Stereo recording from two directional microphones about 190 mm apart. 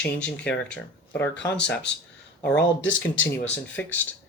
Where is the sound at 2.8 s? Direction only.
80° left.